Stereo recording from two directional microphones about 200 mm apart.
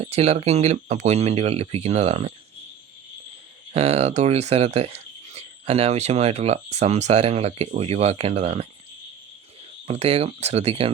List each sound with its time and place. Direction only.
0.0 s speech: 30° right (ahead or behind)
3.7 s speech: 30° right (ahead or behind)
9.8 s speech: 30° right (ahead or behind)